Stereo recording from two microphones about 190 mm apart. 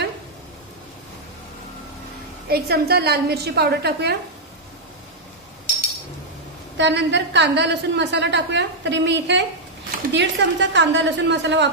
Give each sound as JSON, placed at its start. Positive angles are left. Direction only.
{"t": 2.4, "sound": "a woman's voice", "side_deg": -55}
{"t": 6.8, "sound": "a woman's voice", "side_deg": -65}